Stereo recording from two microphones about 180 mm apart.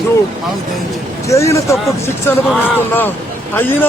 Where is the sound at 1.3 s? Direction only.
15° left (ahead or behind).